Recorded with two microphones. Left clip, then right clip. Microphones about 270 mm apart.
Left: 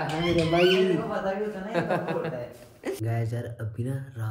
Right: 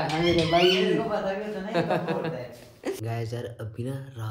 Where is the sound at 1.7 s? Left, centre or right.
Centre.